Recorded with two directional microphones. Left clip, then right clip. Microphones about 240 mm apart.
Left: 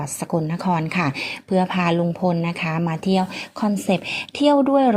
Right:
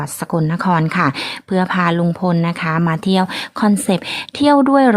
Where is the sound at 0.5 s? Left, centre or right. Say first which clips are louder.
Right 6 dB; centre.